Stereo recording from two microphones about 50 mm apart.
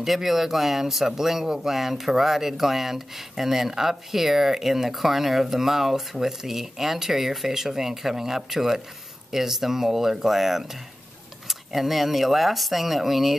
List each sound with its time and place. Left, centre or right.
0.0 s speech: centre